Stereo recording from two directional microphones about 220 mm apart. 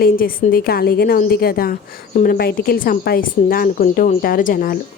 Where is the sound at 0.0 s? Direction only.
40° left (ahead or behind).